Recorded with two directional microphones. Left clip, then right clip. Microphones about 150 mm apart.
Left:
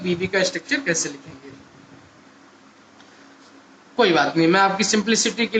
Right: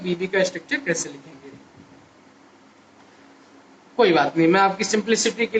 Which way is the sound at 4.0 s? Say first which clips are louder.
Even; 30° left (ahead or behind).